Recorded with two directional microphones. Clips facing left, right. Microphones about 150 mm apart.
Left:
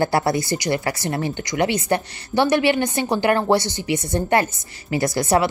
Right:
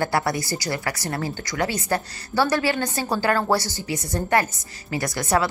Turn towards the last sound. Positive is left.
turn(degrees=25)  # may be behind; listen again after turning